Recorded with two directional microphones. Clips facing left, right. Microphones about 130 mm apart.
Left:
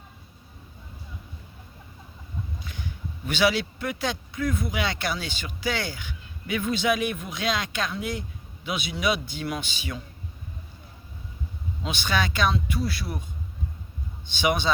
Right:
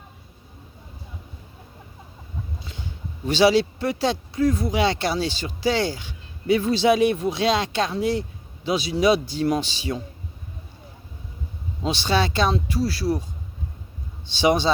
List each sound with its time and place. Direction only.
2.6 s speech: 30° right (ahead or behind)
11.8 s speech: 35° right (ahead or behind)
14.3 s speech: 35° right (ahead or behind)